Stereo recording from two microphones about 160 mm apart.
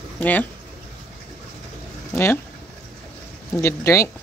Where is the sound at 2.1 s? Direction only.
15° left (ahead or behind).